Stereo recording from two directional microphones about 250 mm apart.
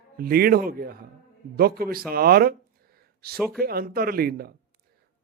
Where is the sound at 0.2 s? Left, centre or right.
Right.